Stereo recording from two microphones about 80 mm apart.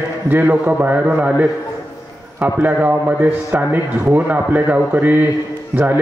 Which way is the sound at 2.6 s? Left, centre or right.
Right.